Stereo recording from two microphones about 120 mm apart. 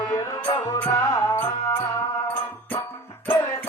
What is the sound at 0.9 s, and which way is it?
Music, 25° left (ahead or behind).